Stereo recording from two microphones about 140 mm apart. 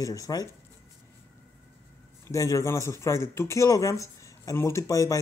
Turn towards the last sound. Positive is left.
turn(degrees=25)  # may be behind; listen again after turning